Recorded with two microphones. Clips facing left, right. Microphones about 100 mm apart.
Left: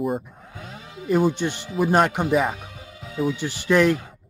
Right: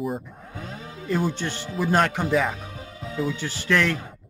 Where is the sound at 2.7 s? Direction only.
35° right (ahead or behind).